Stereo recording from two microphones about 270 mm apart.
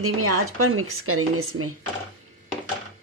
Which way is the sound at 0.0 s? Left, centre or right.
Right.